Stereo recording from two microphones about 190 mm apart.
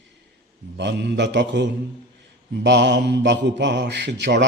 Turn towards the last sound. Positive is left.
turn(degrees=-65)  # may be behind; listen again after turning